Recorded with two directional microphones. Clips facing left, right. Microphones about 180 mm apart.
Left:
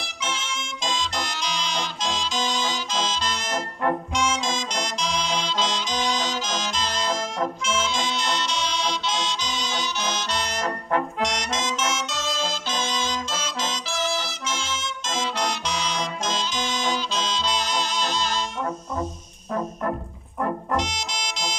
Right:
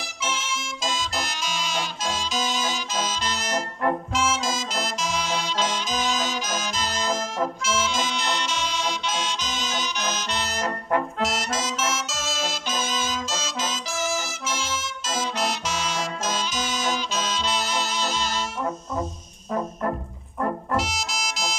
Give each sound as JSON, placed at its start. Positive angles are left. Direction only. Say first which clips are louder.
{"t": 2.3, "sound": "music", "louder": "even", "side_deg": -15}
{"t": 3.4, "sound": "brass instrument", "louder": "right 1 dB", "side_deg": -5}
{"t": 7.1, "sound": "brass instrument", "louder": "right 1 dB", "side_deg": -5}
{"t": 10.4, "sound": "brass instrument", "louder": "even", "side_deg": -5}
{"t": 11.2, "sound": "music", "louder": "even", "side_deg": -5}
{"t": 13.9, "sound": "brass instrument", "louder": "left 1 dB", "side_deg": -10}
{"t": 15.3, "sound": "music", "louder": "even", "side_deg": -5}
{"t": 20.7, "sound": "music", "louder": "even", "side_deg": -5}